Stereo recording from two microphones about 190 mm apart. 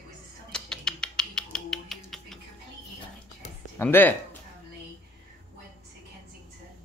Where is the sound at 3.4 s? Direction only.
35° left (ahead or behind).